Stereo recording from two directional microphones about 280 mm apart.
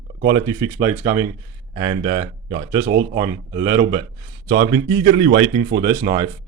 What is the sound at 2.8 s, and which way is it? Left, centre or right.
Speech, right.